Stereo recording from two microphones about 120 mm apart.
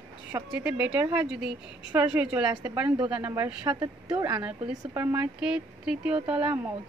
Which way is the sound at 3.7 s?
30° right (ahead or behind).